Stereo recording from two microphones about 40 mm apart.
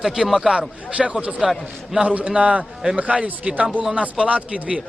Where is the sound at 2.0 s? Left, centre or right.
Right.